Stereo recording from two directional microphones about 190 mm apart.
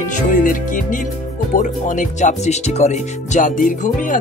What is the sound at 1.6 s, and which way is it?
Speech, 40° left (ahead or behind).